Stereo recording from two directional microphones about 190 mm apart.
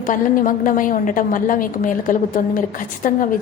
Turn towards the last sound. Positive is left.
turn(degrees=45)  # may be behind; listen again after turning